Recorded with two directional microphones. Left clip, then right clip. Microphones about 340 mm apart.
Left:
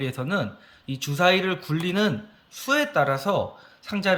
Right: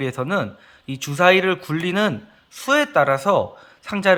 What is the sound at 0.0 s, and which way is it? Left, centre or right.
A man's voice, centre.